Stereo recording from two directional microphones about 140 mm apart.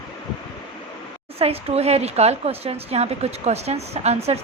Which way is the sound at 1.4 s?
45° right (ahead or behind).